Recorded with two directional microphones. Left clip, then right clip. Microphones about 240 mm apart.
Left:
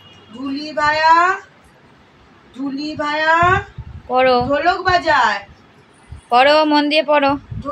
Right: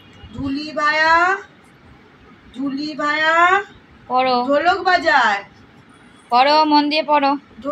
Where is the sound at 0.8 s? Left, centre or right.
Centre.